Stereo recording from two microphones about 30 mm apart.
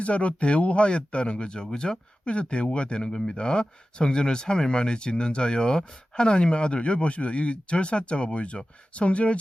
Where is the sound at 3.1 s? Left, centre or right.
Left.